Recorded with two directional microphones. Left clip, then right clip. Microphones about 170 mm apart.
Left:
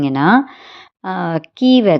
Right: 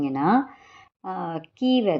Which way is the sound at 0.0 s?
25° left (ahead or behind).